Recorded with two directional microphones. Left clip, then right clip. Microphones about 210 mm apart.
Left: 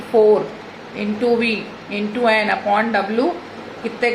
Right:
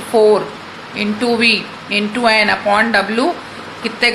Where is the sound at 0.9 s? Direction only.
10° right (ahead or behind).